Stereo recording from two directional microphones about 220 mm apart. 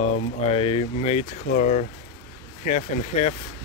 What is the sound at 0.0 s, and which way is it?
Speech, 30° left (ahead or behind).